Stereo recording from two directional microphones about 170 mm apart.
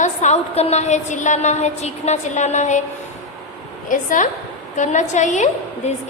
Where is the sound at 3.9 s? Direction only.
50° left (ahead or behind).